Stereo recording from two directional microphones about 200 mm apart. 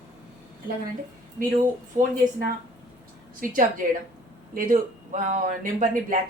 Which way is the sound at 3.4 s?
45° right (ahead or behind).